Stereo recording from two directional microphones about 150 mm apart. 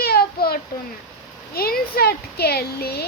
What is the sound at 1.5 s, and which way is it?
Speech, 90° left.